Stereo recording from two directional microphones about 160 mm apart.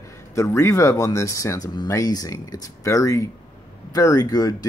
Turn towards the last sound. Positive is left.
turn(degrees=25)  # may be behind; listen again after turning